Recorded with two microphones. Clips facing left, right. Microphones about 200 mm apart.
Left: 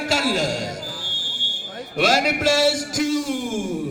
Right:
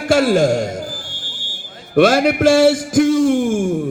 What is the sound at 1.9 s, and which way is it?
A man's voice, 55° right (ahead or behind).